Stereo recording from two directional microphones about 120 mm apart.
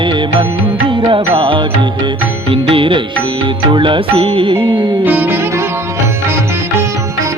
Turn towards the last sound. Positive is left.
turn(degrees=-15)  # may be behind; listen again after turning